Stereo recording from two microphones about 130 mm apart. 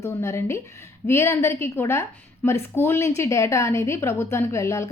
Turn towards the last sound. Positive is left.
turn(degrees=20)  # may be behind; listen again after turning